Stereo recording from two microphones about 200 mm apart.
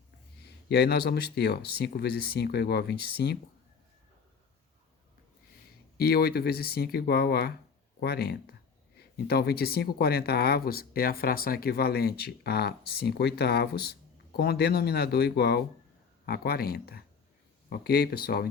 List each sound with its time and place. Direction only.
0.7 s speech: 50° left (ahead or behind)
6.0 s speech: 50° left (ahead or behind)